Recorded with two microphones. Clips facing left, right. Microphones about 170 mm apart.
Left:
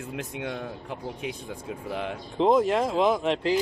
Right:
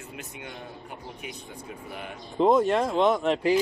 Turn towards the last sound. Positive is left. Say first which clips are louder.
# right 1 dB
turn(degrees=0)  # may be behind; listen again after turning